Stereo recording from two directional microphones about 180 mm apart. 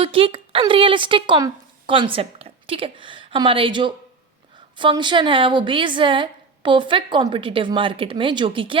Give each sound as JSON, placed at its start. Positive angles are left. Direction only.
{"t": 0.0, "sound": "a woman's voice", "side_deg": -30}